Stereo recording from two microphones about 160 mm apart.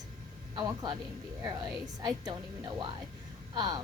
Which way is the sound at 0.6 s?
25° right (ahead or behind).